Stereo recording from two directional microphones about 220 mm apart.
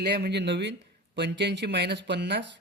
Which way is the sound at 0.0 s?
45° right (ahead or behind).